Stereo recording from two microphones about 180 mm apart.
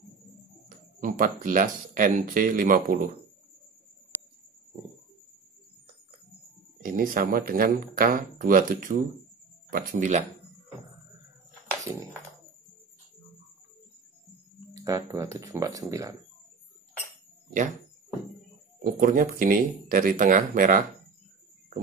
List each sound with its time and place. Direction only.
0.7 s speech: 50° right (ahead or behind)
6.8 s speech: 50° right (ahead or behind)
14.7 s speech: 20° right (ahead or behind)
17.5 s cricket: 45° right (ahead or behind)
18.8 s speech: 50° right (ahead or behind)